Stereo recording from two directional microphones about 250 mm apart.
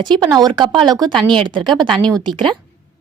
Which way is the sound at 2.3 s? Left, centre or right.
Centre.